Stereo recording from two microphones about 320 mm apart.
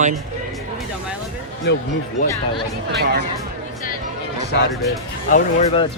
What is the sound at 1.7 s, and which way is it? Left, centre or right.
Speech, left.